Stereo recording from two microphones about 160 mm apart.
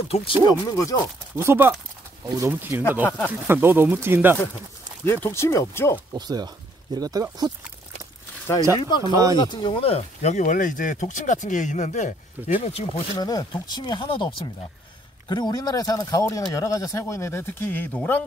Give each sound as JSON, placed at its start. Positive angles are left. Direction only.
{"t": 0.1, "sound": "speech", "side_deg": 35}
{"t": 1.3, "sound": "speech", "side_deg": -15}
{"t": 5.0, "sound": "speech", "side_deg": 15}
{"t": 6.1, "sound": "speech", "side_deg": -25}
{"t": 8.7, "sound": "speech", "side_deg": 30}
{"t": 13.2, "sound": "speech", "side_deg": 25}